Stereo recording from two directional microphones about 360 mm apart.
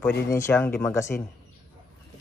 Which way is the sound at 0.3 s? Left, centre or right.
Centre.